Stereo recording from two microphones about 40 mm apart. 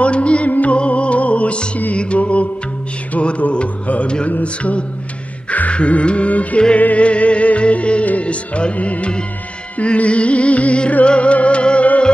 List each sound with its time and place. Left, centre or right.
0.0 s music: left
0.5 s music: left